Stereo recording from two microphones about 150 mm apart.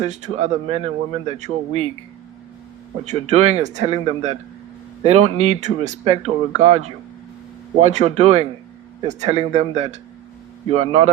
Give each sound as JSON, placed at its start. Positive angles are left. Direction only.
{"t": 0.0, "sound": "speech", "side_deg": -50}
{"t": 3.0, "sound": "speech", "side_deg": -45}